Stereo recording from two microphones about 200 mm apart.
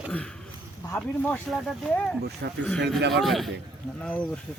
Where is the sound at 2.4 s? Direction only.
60° right (ahead or behind).